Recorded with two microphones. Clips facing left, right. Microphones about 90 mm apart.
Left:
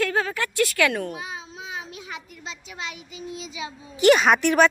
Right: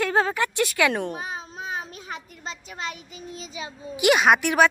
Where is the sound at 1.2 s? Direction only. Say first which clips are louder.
Right 3 dB; 45° right (ahead or behind).